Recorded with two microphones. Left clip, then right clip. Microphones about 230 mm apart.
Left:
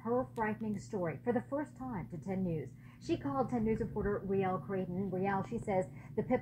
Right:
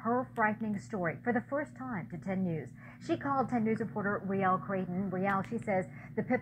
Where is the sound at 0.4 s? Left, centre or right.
Right.